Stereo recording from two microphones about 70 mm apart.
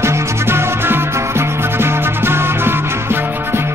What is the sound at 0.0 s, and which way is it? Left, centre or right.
Music, right.